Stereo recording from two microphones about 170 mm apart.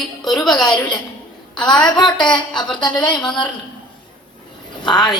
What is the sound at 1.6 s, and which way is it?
Speech, 25° left (ahead or behind).